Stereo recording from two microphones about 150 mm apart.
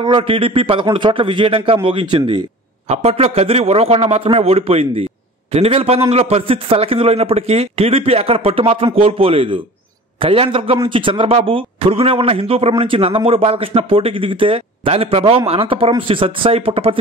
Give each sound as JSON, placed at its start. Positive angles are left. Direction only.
{"t": 0.0, "sound": "a man's voice", "side_deg": -35}
{"t": 2.9, "sound": "a man's voice", "side_deg": -45}